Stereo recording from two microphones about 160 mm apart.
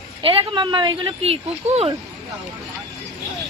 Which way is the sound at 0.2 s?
35° right (ahead or behind).